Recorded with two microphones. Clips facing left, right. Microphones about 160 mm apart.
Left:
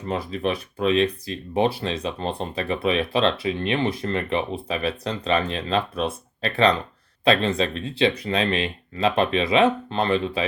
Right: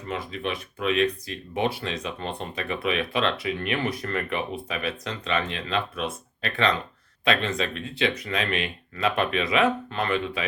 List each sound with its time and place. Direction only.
0.1 s speech: 35° left (ahead or behind)